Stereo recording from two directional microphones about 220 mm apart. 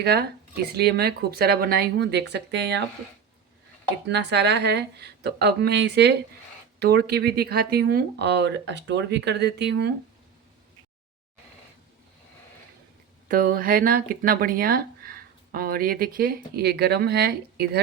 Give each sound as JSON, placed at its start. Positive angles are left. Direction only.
{"t": 0.0, "sound": "speech", "side_deg": -45}
{"t": 4.0, "sound": "speech", "side_deg": -50}
{"t": 13.2, "sound": "speech", "side_deg": -40}